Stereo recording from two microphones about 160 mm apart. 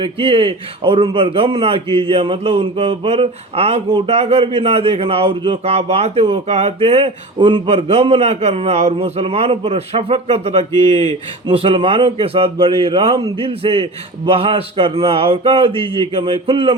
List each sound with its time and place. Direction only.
0.0 s a man's voice: 35° right (ahead or behind)